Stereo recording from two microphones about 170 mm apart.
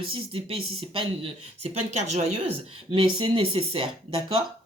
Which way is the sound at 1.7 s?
45° right (ahead or behind).